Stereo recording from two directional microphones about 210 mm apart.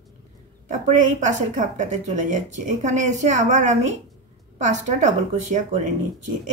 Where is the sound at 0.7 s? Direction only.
35° right (ahead or behind).